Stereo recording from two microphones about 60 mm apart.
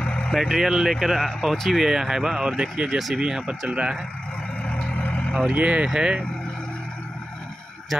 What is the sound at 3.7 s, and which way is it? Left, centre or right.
Speech, centre.